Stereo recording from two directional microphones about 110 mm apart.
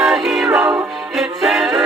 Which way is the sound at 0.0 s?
Centre (ahead or behind).